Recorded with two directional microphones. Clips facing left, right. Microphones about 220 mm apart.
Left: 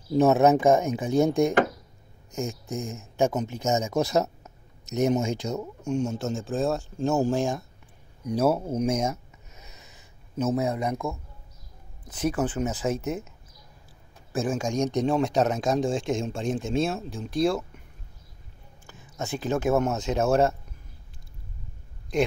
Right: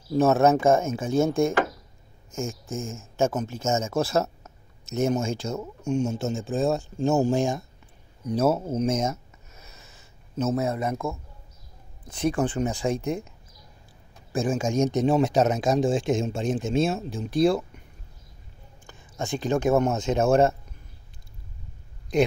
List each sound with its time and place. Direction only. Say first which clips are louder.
0.1 s speech: even; 15° left (ahead or behind)
5.6 s speech: right 1 dB; centre (ahead or behind)
8.2 s speech: right 1 dB; 10° left (ahead or behind)
8.7 s a sound: right 1 dB; 10° left (ahead or behind)
12.1 s speech: right 2 dB; 5° left (ahead or behind)
14.3 s speech: right 2 dB; centre (ahead or behind)
18.9 s speech: right 2 dB; 5° left (ahead or behind)
22.1 s speech: right 3 dB; centre (ahead or behind)